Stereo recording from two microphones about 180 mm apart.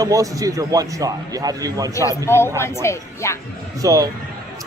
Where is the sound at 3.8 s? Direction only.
20° right (ahead or behind).